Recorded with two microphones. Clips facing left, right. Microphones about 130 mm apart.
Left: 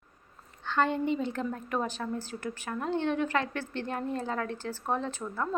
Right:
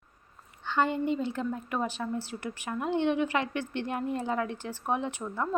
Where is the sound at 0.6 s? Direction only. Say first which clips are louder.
Even; 5° right (ahead or behind).